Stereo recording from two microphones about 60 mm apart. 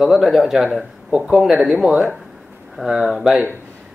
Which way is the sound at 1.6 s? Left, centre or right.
Centre.